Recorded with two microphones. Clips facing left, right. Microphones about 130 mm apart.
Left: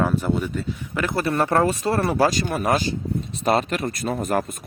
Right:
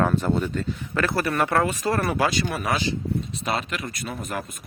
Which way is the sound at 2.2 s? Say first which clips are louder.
Left 4 dB; 40° left (ahead or behind).